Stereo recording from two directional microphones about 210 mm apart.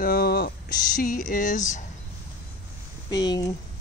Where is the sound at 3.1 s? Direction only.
20° left (ahead or behind).